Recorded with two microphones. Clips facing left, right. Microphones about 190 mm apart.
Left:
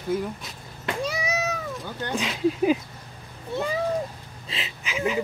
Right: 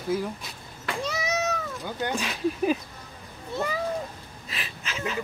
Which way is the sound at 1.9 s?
15° right (ahead or behind).